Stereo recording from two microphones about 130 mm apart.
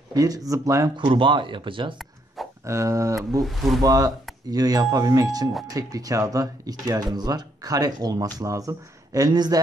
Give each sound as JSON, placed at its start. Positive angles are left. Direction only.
{"t": 0.1, "sound": "speech", "side_deg": -30}
{"t": 0.9, "sound": "speech", "side_deg": -40}
{"t": 2.6, "sound": "speech", "side_deg": -25}
{"t": 3.3, "sound": "speech", "side_deg": 0}
{"t": 3.8, "sound": "speech", "side_deg": -30}